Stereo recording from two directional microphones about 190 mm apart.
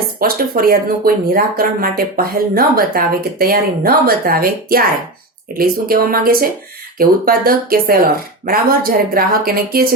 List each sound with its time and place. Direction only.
0.2 s speech: 50° right (ahead or behind)